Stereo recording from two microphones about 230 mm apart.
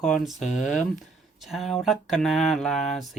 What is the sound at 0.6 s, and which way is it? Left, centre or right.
Speech, left.